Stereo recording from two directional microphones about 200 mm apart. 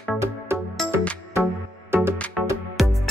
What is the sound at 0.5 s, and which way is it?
Music, 10° right (ahead or behind).